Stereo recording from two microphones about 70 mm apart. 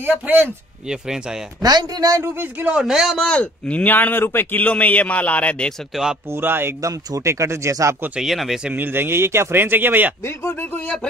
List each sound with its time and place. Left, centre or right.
0.0 s speech: right
0.8 s a man's voice: centre
1.6 s a man's voice: right
2.7 s a man's voice: centre
3.2 s speech: centre
6.3 s a man's voice: right
6.8 s speech: right
7.2 s speech: right
8.2 s speech: centre
8.7 s a man's voice: right
10.2 s speech: left